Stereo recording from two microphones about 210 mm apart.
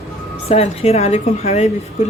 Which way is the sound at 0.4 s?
30° left (ahead or behind).